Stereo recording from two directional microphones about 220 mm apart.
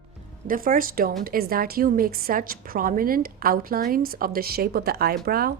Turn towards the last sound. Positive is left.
turn(degrees=-45)  # may be behind; listen again after turning